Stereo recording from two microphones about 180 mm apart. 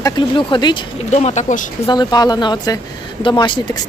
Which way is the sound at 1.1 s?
40° left (ahead or behind).